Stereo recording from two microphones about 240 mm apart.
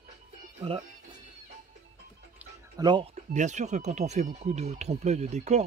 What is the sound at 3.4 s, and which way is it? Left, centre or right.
Speech, right.